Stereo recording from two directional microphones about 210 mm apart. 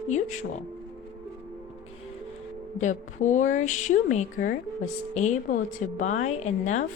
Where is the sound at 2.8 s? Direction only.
35° left (ahead or behind).